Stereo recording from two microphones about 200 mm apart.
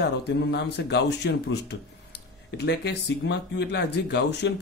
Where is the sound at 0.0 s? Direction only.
55° left (ahead or behind).